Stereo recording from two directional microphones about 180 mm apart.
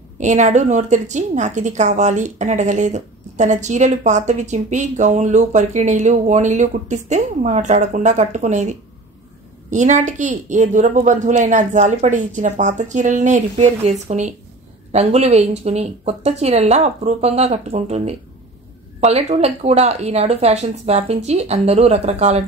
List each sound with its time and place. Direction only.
0.2 s a woman's voice: 40° right (ahead or behind)
19.1 s a woman's voice: 35° right (ahead or behind)